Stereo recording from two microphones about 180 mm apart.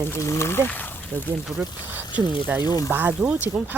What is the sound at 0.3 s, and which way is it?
Speech, 15° left (ahead or behind).